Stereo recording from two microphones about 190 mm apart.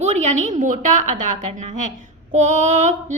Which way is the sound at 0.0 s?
35° right (ahead or behind).